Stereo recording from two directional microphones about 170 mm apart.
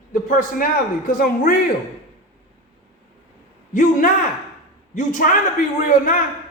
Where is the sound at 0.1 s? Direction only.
50° left (ahead or behind).